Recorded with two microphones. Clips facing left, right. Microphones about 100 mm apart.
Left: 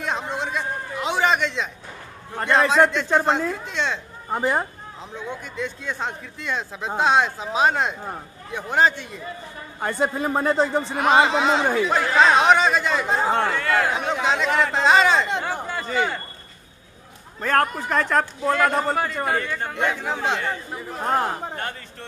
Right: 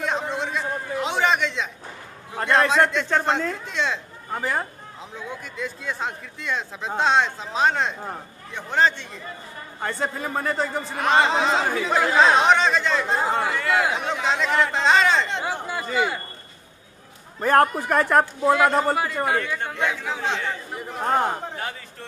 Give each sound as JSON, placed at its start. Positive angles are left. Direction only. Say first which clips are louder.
{"t": 0.0, "sound": "a sound", "louder": "right 1 dB", "side_deg": 0}
{"t": 2.3, "sound": "speech", "louder": "left 1 dB", "side_deg": 0}
{"t": 4.3, "sound": "a man's voice", "louder": "left 4 dB", "side_deg": 20}
{"t": 5.1, "sound": "a man's voice", "louder": "left 3 dB", "side_deg": 0}
{"t": 11.0, "sound": "speech", "louder": "left 1 dB", "side_deg": 5}
{"t": 15.6, "sound": "speech", "louder": "even", "side_deg": -10}
{"t": 17.4, "sound": "speech", "louder": "right 3 dB", "side_deg": -15}